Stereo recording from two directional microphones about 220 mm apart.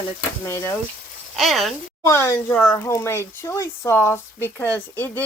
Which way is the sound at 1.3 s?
Centre (ahead or behind).